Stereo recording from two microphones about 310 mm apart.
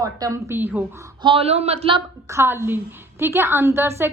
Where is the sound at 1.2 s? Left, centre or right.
Centre.